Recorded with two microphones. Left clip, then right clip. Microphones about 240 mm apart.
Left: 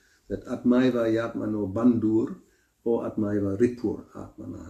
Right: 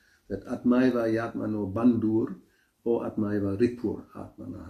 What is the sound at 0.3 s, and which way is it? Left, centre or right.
Speech, centre.